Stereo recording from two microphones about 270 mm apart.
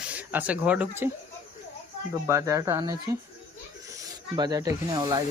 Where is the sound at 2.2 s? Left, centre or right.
Centre.